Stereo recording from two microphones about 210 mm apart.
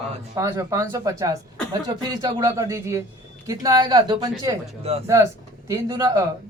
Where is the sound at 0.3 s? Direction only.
15° right (ahead or behind).